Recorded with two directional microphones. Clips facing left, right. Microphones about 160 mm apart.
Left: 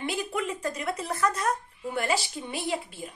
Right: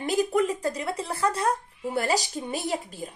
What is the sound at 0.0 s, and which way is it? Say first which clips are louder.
A woman's voice: right 7 dB; 40° right (ahead or behind).